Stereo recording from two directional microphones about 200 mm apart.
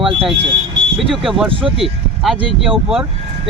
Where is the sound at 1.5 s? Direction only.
25° right (ahead or behind).